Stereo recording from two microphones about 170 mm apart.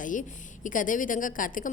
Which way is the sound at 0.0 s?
50° left (ahead or behind).